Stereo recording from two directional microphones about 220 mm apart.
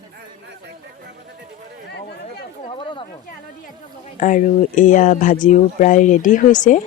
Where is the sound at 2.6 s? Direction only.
20° left (ahead or behind).